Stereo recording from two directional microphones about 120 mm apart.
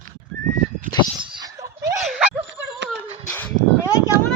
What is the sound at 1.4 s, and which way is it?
Snicker, 30° right (ahead or behind).